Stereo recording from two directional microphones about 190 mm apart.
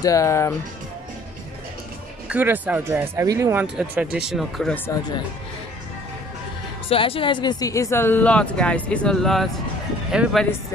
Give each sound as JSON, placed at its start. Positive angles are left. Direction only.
{"t": 0.0, "sound": "speech", "side_deg": 15}
{"t": 2.2, "sound": "speech", "side_deg": -10}
{"t": 3.6, "sound": "speech", "side_deg": -5}
{"t": 6.9, "sound": "speech", "side_deg": 30}